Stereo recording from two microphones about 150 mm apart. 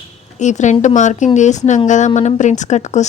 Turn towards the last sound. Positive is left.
turn(degrees=50)  # may be behind; listen again after turning